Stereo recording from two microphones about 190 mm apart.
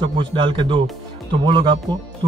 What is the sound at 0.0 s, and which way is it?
Speech, 25° right (ahead or behind).